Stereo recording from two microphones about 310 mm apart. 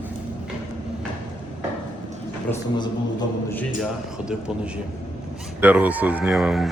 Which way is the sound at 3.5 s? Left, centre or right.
Centre.